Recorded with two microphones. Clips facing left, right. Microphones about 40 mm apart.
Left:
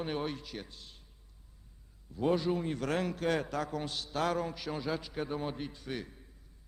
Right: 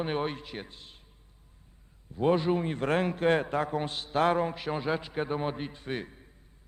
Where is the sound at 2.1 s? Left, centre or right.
Right.